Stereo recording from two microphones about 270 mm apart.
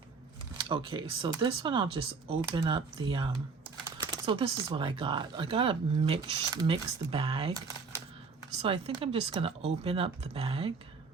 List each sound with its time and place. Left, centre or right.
0.7 s speech: centre
8.6 s speech: right